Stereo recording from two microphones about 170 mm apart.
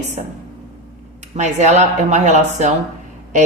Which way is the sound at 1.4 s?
40° right (ahead or behind).